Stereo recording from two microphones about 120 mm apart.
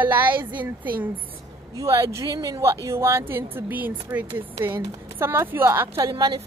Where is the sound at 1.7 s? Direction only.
25° right (ahead or behind).